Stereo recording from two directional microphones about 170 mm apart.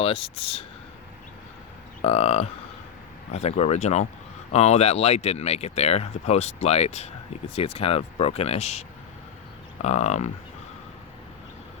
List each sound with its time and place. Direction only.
0.0 s speech: 35° left (ahead or behind)
2.0 s speech: 35° left (ahead or behind)
9.8 s speech: 40° left (ahead or behind)